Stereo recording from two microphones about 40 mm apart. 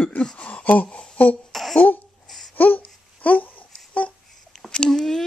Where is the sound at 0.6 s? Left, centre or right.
Left.